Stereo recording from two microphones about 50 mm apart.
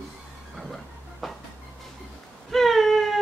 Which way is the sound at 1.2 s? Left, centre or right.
Centre.